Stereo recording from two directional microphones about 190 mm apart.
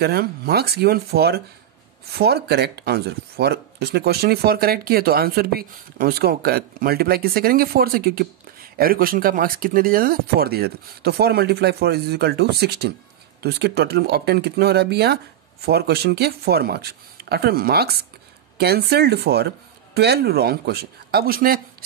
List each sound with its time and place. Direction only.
0.0 s speech: 55° right (ahead or behind)